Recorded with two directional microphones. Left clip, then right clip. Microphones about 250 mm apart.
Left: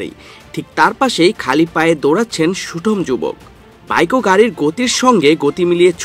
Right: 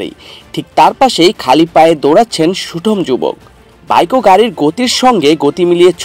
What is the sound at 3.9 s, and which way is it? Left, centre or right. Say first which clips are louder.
Speech: right 6 dB; left.